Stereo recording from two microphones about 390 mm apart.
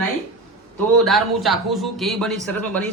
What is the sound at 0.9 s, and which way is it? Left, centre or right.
Speech, centre.